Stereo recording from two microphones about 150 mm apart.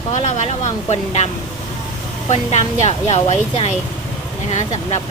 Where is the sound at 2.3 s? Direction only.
50° left (ahead or behind).